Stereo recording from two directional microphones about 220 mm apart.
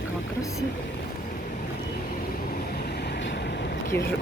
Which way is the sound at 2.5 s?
45° left (ahead or behind).